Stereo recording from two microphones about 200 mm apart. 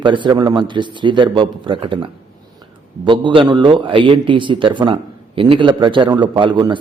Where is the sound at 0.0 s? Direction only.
25° right (ahead or behind).